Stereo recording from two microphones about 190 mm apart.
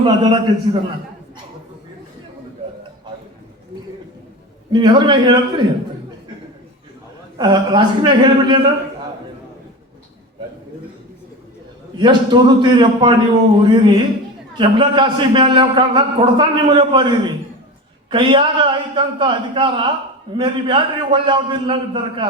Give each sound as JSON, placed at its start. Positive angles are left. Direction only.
{"t": 0.0, "sound": "a man's voice", "side_deg": -25}
{"t": 4.7, "sound": "a man's voice", "side_deg": -20}
{"t": 7.3, "sound": "a man's voice", "side_deg": -25}
{"t": 11.9, "sound": "a man's voice", "side_deg": -25}